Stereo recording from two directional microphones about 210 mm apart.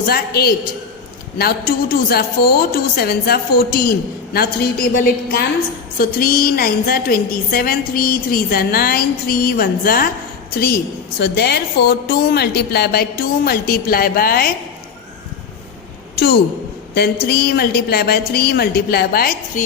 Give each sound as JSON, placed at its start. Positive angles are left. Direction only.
{"t": 0.0, "sound": "a woman's voice", "side_deg": 45}
{"t": 16.9, "sound": "a woman's voice", "side_deg": 50}